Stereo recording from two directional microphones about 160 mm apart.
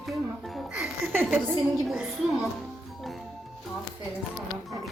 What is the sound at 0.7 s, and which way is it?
Music, 10° right (ahead or behind).